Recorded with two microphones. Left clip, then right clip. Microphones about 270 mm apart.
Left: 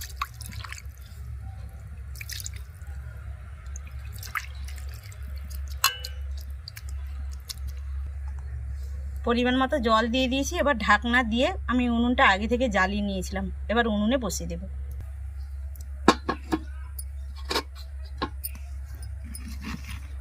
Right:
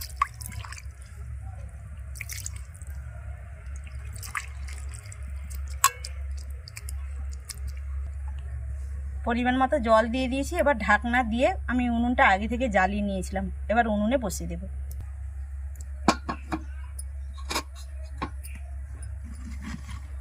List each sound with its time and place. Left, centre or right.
0.2 s drip: centre
4.3 s drip: centre
9.2 s a woman's voice: centre
16.0 s a sound: centre